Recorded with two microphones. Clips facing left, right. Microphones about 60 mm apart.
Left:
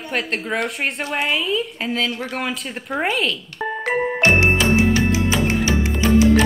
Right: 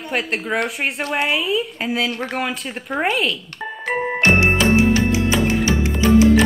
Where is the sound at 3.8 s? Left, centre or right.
Centre.